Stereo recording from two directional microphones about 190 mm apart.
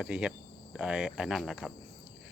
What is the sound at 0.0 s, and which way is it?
Speech, 5° right (ahead or behind).